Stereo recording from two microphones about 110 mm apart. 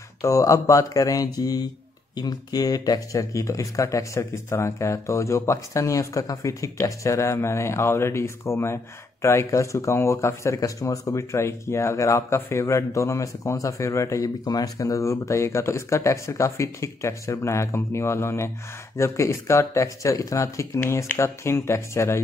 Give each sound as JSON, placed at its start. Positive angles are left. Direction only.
{"t": 0.2, "sound": "speech", "side_deg": 30}